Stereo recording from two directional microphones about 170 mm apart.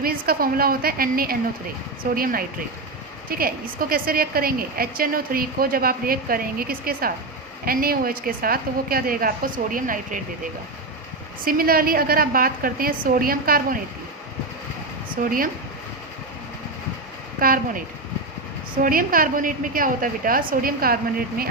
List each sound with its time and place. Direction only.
0.0 s a woman's voice: 60° right (ahead or behind)
11.4 s a woman's voice: 60° right (ahead or behind)
15.2 s a woman's voice: 55° right (ahead or behind)
18.8 s a woman's voice: 55° right (ahead or behind)